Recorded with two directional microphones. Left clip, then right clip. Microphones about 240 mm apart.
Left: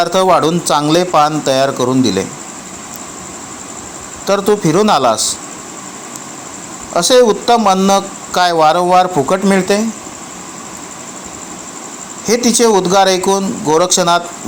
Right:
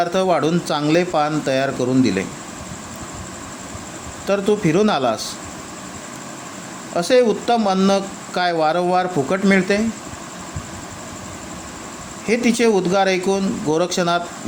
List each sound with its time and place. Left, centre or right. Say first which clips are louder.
0.0 s speech: left 7 dB; centre
4.3 s speech: left 6 dB; centre
6.9 s speech: left 6 dB; centre
12.3 s speech: left 6 dB; centre